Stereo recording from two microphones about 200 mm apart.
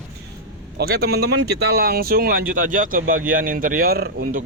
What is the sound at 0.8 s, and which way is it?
Speech, 50° right (ahead or behind).